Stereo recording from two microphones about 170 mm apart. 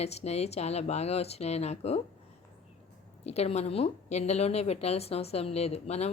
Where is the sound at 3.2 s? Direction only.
40° left (ahead or behind).